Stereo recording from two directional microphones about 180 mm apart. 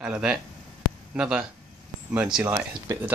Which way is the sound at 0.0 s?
5° right (ahead or behind).